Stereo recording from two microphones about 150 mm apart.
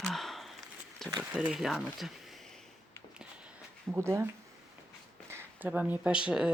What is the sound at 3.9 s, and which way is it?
Speech, 15° right (ahead or behind).